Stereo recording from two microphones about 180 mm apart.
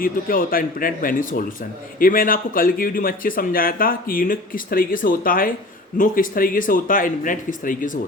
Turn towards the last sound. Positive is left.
turn(degrees=50)  # may be behind; listen again after turning